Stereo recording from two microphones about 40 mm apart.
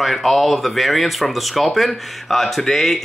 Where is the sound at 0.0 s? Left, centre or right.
Centre.